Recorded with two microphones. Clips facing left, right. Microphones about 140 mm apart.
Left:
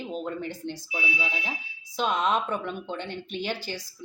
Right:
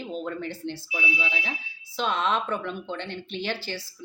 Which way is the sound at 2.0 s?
10° left (ahead or behind).